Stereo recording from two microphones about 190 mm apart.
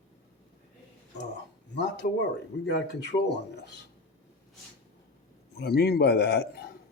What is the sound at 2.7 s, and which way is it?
Speech, 65° left (ahead or behind).